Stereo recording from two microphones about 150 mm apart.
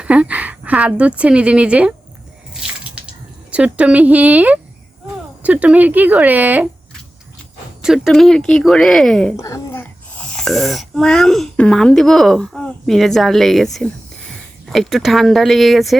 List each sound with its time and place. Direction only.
0.0 s a woman's voice: 10° right (ahead or behind)
3.0 s a sound: 10° right (ahead or behind)
3.5 s a woman's voice: 10° right (ahead or behind)
7.8 s speech: centre (ahead or behind)
9.3 s speech: 20° left (ahead or behind)
9.8 s speech: 5° left (ahead or behind)